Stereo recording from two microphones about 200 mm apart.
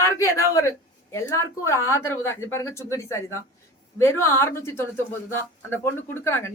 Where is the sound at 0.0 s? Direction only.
15° left (ahead or behind).